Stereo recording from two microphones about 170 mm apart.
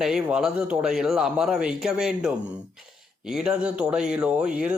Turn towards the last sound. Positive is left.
turn(degrees=-5)  # may be behind; listen again after turning